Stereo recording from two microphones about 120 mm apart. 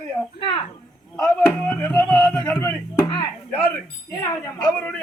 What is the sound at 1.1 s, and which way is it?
Speech, 10° left (ahead or behind).